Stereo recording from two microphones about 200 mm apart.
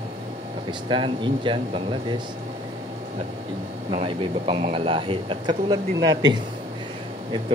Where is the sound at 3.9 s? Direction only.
25° right (ahead or behind).